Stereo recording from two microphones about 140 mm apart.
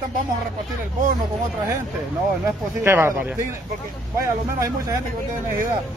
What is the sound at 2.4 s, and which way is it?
Speech, 15° right (ahead or behind).